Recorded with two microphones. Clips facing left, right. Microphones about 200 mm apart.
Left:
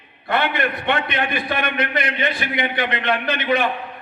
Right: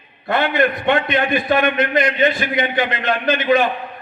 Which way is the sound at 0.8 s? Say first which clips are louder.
Right 5 dB; 45° right (ahead or behind).